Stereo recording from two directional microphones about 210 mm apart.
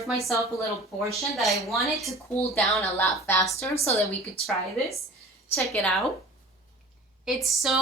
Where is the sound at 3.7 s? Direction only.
30° left (ahead or behind).